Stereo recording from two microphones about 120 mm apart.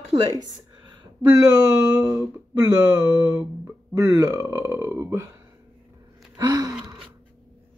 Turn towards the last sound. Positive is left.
turn(degrees=-30)  # may be behind; listen again after turning